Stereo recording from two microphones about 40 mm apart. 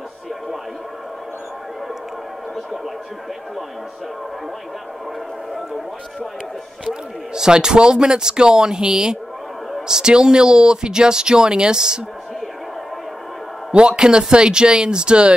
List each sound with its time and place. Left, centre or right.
6.9 s speech: centre
13.7 s speech: right